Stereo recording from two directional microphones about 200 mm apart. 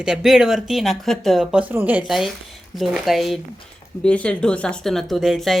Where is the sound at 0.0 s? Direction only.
5° right (ahead or behind).